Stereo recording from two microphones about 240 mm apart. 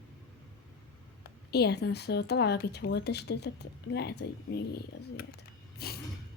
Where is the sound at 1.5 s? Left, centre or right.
Left.